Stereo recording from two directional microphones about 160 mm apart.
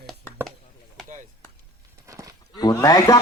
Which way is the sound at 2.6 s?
25° left (ahead or behind).